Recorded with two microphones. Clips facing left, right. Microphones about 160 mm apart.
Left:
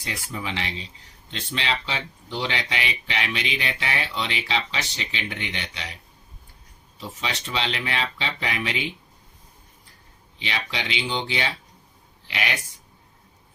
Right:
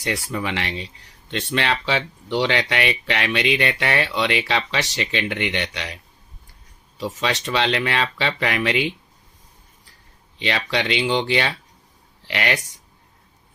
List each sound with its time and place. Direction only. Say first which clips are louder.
0.0 s speech: right 7 dB; 70° right (ahead or behind)
7.0 s speech: right 8 dB; 80° right
10.3 s speech: right 7 dB; 70° right (ahead or behind)